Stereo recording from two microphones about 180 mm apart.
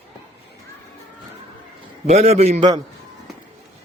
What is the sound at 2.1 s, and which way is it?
Speech, 35° right (ahead or behind).